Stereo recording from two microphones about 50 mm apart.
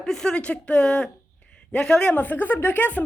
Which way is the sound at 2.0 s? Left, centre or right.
Left.